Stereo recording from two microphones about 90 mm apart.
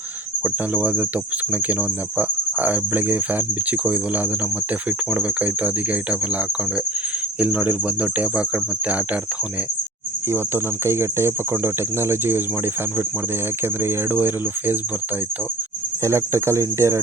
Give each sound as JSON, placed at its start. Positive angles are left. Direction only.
{"t": 0.4, "sound": "speech", "side_deg": -15}
{"t": 2.1, "sound": "speech", "side_deg": -20}
{"t": 7.3, "sound": "speech", "side_deg": -15}
{"t": 10.3, "sound": "speech", "side_deg": -30}
{"t": 13.8, "sound": "speech", "side_deg": -25}
{"t": 16.0, "sound": "cricket", "side_deg": -30}